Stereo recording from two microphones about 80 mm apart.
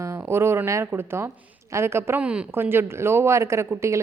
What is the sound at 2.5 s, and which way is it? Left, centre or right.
A woman's voice, right.